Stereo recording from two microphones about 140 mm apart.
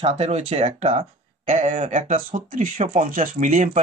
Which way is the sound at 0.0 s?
45° right (ahead or behind).